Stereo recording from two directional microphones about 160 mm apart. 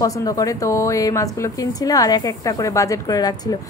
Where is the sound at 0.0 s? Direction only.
20° left (ahead or behind).